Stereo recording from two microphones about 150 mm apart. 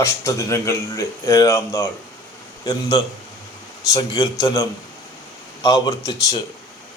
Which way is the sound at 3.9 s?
25° left (ahead or behind).